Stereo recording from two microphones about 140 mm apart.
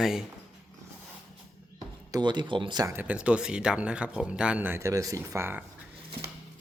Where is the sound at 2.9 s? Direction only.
10° right (ahead or behind).